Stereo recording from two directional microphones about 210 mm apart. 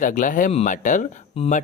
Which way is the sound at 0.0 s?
40° left (ahead or behind).